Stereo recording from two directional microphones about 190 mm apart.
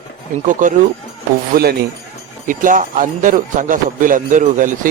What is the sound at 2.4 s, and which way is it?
Speech, 45° right (ahead or behind).